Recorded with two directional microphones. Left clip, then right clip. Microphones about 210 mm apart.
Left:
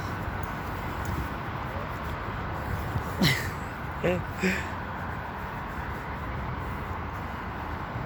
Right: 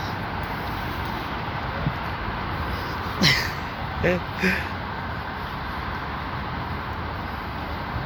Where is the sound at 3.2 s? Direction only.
15° left (ahead or behind).